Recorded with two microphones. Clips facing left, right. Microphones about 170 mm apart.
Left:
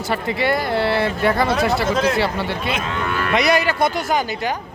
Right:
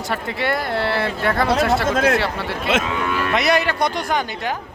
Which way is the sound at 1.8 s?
55° right (ahead or behind).